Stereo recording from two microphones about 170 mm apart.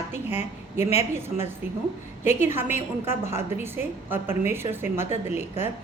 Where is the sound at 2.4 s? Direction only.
15° right (ahead or behind).